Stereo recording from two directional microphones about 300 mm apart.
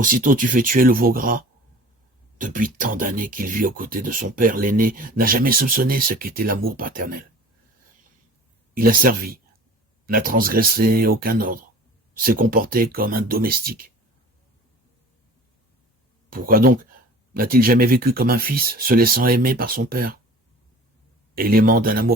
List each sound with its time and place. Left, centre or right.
0.0 s speech: right
8.7 s speech: right
16.3 s speech: right
21.3 s speech: right